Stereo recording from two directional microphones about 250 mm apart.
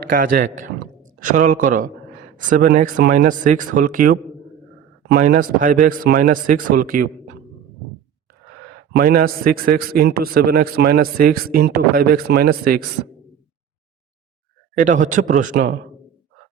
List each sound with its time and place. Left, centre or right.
0.0 s a man's voice: right
8.9 s a man's voice: right
14.8 s a man's voice: right